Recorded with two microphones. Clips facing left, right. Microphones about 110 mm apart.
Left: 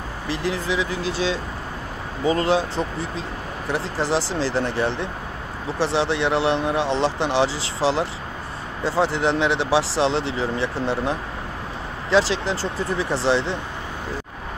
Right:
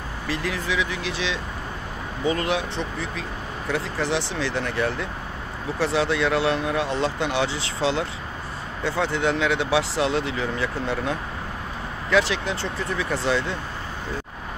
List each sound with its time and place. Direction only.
0.3 s speech: 30° left (ahead or behind)